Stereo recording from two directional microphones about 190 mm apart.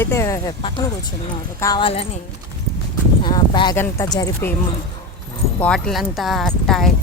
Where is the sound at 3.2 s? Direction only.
25° left (ahead or behind).